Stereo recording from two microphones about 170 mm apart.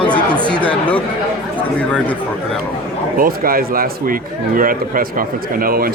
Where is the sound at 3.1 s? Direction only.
55° right (ahead or behind).